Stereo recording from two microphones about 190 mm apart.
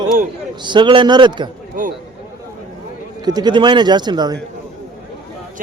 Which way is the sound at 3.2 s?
20° right (ahead or behind).